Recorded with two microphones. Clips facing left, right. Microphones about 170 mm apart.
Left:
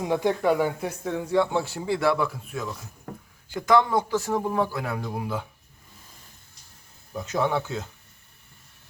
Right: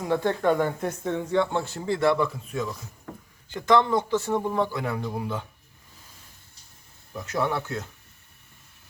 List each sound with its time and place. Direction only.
0.0 s a man's voice: 15° left (ahead or behind)
7.2 s a man's voice: 20° left (ahead or behind)